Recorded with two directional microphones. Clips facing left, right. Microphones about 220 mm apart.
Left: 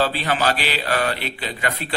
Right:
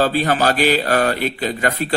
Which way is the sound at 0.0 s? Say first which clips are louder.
Right 4 dB; 45° right (ahead or behind).